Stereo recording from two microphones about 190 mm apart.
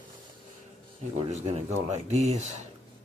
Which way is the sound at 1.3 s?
35° right (ahead or behind).